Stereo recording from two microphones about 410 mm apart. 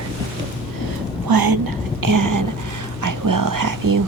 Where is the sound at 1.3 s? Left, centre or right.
Right.